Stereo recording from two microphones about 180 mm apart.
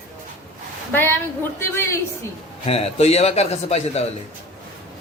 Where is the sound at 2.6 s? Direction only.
35° left (ahead or behind).